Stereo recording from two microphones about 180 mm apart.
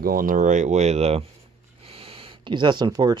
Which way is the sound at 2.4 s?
25° right (ahead or behind).